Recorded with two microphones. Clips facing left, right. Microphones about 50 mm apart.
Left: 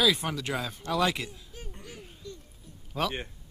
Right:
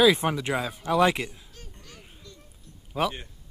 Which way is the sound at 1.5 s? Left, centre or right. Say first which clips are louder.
Left 4 dB; centre.